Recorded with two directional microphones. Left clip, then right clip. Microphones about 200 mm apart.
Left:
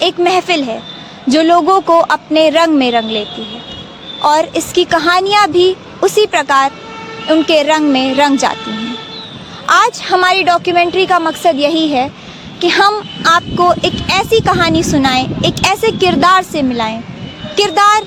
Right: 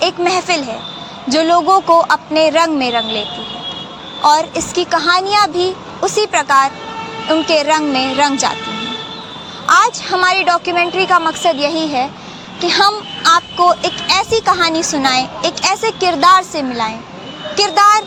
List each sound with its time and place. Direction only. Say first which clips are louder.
0.0 s speech: left 3 dB; 50° left (ahead or behind)
9.6 s speech: left 1 dB; 55° left (ahead or behind)